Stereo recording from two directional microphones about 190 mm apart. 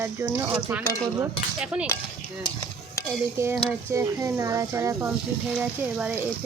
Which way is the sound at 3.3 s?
15° right (ahead or behind).